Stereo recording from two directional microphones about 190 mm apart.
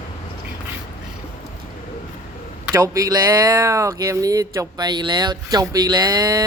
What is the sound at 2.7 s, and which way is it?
Speech, 15° right (ahead or behind).